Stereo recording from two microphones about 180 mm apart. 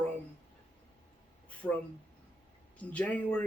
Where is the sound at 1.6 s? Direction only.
10° left (ahead or behind).